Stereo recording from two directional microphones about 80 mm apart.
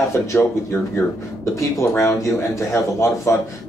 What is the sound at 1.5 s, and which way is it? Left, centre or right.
A man's voice, left.